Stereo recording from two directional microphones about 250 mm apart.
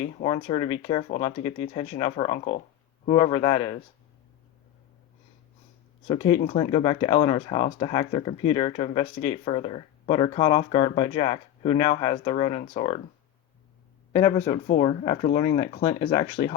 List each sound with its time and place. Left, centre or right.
0.2 s speech: left
6.1 s speech: left
14.8 s speech: left
15.8 s speech: centre